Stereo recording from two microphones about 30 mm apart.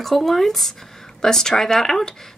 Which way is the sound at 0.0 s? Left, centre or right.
Centre.